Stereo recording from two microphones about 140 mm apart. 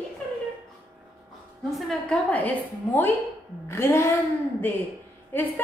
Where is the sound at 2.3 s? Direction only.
10° left (ahead or behind).